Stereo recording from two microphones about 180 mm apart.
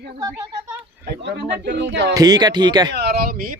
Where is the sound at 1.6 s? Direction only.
75° right (ahead or behind).